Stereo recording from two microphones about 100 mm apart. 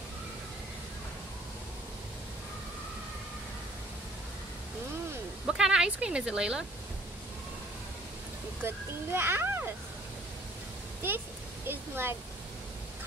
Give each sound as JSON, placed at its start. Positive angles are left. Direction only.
{"t": 5.5, "sound": "speech", "side_deg": -10}
{"t": 8.6, "sound": "a child's voice", "side_deg": -25}
{"t": 11.6, "sound": "a child's voice", "side_deg": -20}